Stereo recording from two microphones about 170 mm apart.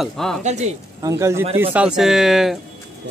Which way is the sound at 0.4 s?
45° right (ahead or behind).